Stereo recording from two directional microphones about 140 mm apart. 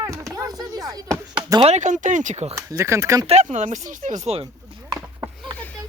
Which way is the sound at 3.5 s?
65° right (ahead or behind).